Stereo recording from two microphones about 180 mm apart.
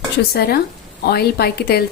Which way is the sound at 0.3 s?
60° left (ahead or behind).